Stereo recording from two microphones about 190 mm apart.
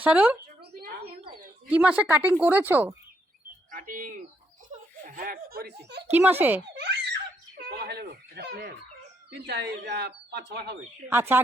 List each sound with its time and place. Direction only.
0.0 s a woman's voice: 10° right (ahead or behind)
0.6 s a sound: 50° right (ahead or behind)
1.7 s a woman's voice: 5° right (ahead or behind)
3.7 s speech: 45° right (ahead or behind)
4.7 s a sound: 45° right (ahead or behind)
6.1 s a woman's voice: 10° right (ahead or behind)
6.7 s baby laughter: 65° right (ahead or behind)
7.6 s speech: 60° right (ahead or behind)
11.1 s a woman's voice: 10° right (ahead or behind)